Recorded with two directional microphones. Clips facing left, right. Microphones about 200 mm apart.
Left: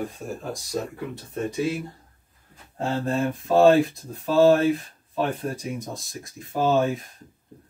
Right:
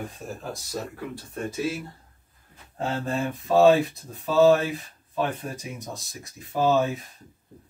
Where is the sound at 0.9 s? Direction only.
20° left (ahead or behind).